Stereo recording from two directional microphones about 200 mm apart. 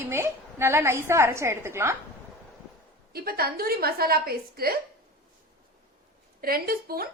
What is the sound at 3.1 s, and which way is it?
A woman's voice, 50° right (ahead or behind).